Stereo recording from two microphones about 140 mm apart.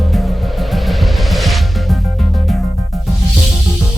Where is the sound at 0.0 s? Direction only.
Centre (ahead or behind).